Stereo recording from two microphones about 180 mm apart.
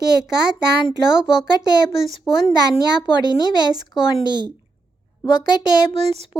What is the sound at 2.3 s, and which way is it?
Speech, 30° left (ahead or behind).